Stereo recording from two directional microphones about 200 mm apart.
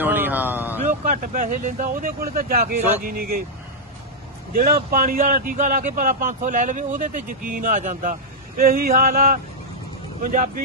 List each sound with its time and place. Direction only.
0.0 s a sound: 10° right (ahead or behind)
0.9 s speech: 40° right (ahead or behind)
4.5 s speech: 45° right (ahead or behind)